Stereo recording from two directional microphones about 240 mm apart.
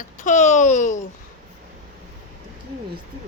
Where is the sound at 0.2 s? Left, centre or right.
Left.